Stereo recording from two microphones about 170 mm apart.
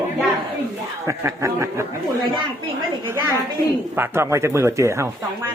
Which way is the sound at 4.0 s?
15° right (ahead or behind).